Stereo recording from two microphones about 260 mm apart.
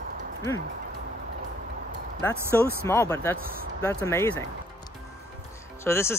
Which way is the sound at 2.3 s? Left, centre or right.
Centre.